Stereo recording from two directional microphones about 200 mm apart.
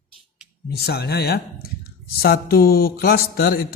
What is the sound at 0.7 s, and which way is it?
Speech, 50° left (ahead or behind).